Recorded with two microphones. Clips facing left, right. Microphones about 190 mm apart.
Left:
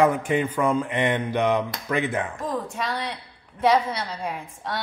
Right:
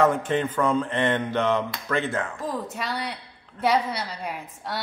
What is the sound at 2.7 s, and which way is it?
A woman's voice, 5° right (ahead or behind).